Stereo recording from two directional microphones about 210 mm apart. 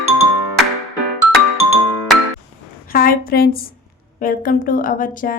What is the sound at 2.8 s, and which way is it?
A woman's voice, 45° left (ahead or behind).